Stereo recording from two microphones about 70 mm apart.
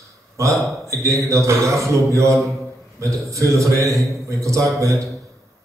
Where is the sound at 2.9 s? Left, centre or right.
Right.